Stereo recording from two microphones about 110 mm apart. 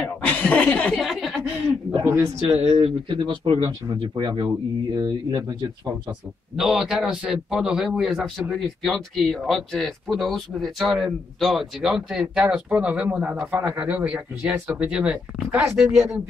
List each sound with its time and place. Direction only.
0.0 s speech: 10° left (ahead or behind)
1.0 s chuckle: 5° right (ahead or behind)
2.0 s speech: 25° right (ahead or behind)
2.7 s speech: 50° right (ahead or behind)
6.5 s a man's voice: 5° right (ahead or behind)
15.6 s speech: 25° right (ahead or behind)